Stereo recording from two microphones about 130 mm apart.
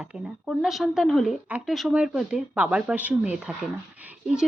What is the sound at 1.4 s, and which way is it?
Speech, 10° right (ahead or behind).